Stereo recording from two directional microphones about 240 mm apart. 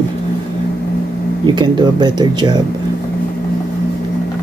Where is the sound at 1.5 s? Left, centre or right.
Centre.